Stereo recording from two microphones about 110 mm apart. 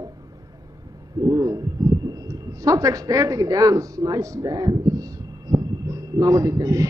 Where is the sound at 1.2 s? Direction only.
30° right (ahead or behind).